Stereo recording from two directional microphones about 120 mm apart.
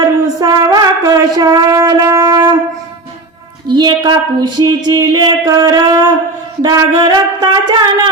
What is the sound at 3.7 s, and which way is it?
Speech, 40° right (ahead or behind).